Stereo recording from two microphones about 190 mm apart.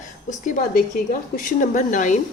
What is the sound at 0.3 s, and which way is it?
A woman's voice, 45° left (ahead or behind).